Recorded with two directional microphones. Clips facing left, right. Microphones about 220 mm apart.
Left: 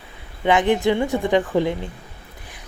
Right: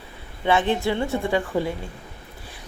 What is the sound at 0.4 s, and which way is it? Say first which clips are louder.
Speech: left 4 dB; 15° left (ahead or behind).